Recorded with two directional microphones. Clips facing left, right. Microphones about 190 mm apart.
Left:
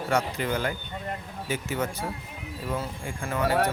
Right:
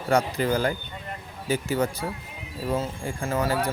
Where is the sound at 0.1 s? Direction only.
35° right (ahead or behind).